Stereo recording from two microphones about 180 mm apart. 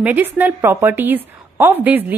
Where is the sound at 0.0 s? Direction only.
10° right (ahead or behind).